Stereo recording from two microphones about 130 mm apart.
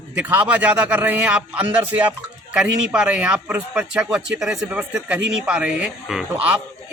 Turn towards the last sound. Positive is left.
turn(degrees=-10)  # may be behind; listen again after turning